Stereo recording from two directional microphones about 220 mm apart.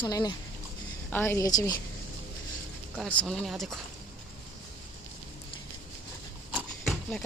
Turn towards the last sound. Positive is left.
turn(degrees=0)  # may be behind; listen again after turning